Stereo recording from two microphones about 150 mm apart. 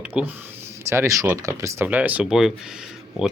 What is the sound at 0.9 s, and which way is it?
Speech, 20° right (ahead or behind).